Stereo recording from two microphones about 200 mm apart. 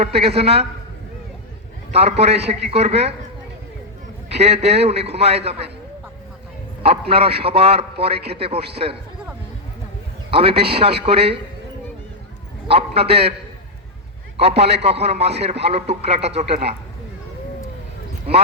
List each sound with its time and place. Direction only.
0.0 s a man's voice: 30° right (ahead or behind)
1.9 s a man's voice: 30° right (ahead or behind)
4.3 s a man's voice: 30° right (ahead or behind)
6.8 s a man's voice: 30° right (ahead or behind)
10.3 s a man's voice: 30° right (ahead or behind)
12.6 s a man's voice: 30° right (ahead or behind)
14.3 s a man's voice: 30° right (ahead or behind)